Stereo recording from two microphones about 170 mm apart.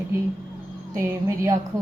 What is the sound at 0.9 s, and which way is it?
Speech, 15° right (ahead or behind).